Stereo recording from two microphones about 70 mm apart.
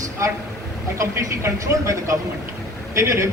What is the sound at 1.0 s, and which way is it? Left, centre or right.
A woman's voice, right.